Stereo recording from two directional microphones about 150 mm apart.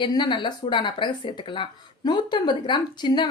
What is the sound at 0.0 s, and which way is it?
A woman's voice, 30° left (ahead or behind).